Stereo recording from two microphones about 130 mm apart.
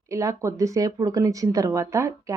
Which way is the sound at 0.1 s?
25° right (ahead or behind).